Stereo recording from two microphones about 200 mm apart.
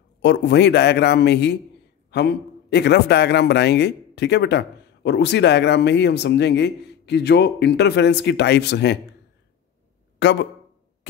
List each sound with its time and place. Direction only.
0.2 s a man's voice: 60° left (ahead or behind)
10.1 s speech: 60° left (ahead or behind)